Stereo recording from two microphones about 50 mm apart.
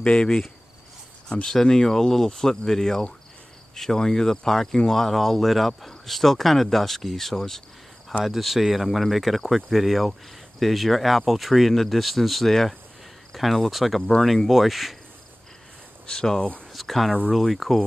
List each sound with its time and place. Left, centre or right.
0.0 s cricket: centre
1.3 s speech: centre
16.1 s speech: centre
16.7 s speech: centre